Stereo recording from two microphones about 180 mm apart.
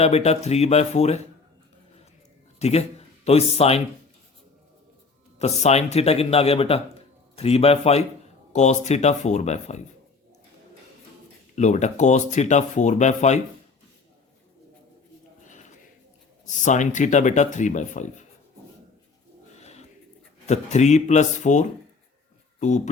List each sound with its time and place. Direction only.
0.0 s speech: 35° left (ahead or behind)
2.6 s a man's voice: 35° left (ahead or behind)
5.4 s speech: 35° left (ahead or behind)
11.5 s speech: 40° left (ahead or behind)
16.5 s speech: 45° left (ahead or behind)
19.5 s a sound: 40° left (ahead or behind)
20.5 s speech: 40° left (ahead or behind)